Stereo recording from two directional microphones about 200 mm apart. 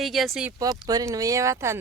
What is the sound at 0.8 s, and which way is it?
Speech, 20° right (ahead or behind).